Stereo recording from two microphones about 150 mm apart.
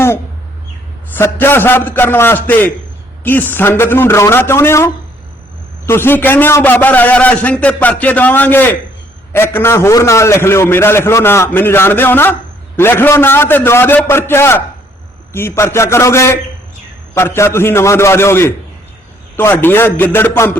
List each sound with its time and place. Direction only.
1.1 s a man's voice: 15° left (ahead or behind)